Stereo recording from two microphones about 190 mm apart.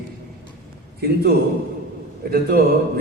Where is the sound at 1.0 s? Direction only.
55° right (ahead or behind).